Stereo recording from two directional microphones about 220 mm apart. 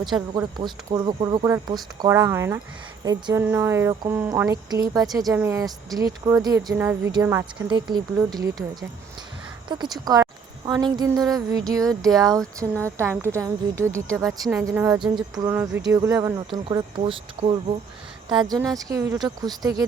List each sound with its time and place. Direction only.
0.3 s speech: 20° right (ahead or behind)
9.6 s speech: 20° right (ahead or behind)
15.4 s speech: 10° right (ahead or behind)